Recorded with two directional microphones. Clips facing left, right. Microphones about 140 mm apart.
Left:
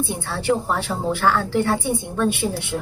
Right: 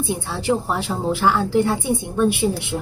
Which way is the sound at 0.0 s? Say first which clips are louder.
Right 1 dB; 15° right (ahead or behind).